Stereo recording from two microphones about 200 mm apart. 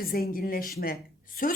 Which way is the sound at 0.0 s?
45° left (ahead or behind).